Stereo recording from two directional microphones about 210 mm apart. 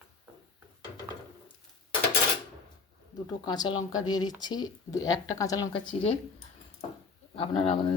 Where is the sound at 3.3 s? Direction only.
20° left (ahead or behind).